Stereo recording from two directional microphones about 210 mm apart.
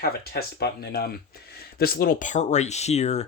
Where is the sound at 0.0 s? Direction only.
50° left (ahead or behind).